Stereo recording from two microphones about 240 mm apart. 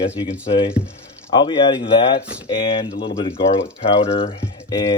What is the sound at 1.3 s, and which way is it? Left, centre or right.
Speech, centre.